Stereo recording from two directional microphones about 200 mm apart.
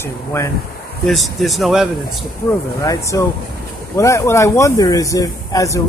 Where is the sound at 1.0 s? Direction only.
Centre (ahead or behind).